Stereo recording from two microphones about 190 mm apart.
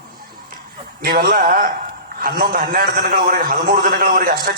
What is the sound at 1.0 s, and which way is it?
A man's voice, 50° right (ahead or behind).